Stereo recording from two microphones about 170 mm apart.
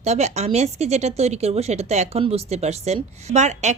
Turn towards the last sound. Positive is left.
turn(degrees=-45)  # may be behind; listen again after turning